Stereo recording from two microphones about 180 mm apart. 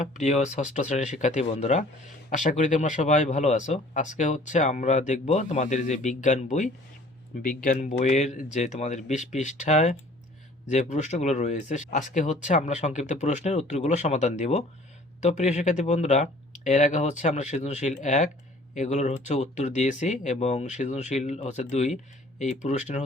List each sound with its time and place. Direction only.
0.2 s speech: 40° left (ahead or behind)